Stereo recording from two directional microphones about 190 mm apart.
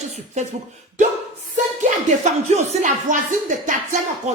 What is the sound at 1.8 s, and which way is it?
Speech, 40° right (ahead or behind).